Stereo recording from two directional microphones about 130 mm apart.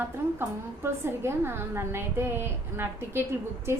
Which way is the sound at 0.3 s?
20° right (ahead or behind).